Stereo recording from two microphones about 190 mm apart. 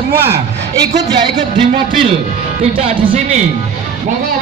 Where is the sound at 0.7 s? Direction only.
25° right (ahead or behind).